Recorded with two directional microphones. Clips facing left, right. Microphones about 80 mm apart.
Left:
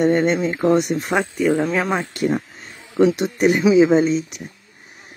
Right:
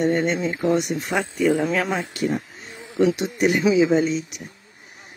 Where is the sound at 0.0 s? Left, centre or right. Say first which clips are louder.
Left 4 dB; left.